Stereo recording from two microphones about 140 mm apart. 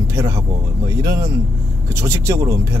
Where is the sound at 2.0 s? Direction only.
20° right (ahead or behind).